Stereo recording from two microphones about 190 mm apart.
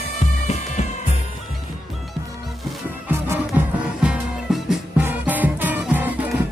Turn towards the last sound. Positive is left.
turn(degrees=-10)  # may be behind; listen again after turning